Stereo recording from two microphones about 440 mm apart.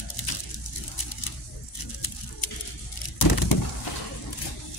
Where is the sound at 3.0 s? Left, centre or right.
Left.